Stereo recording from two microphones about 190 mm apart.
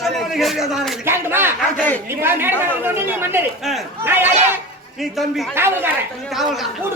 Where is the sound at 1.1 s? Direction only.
10° right (ahead or behind).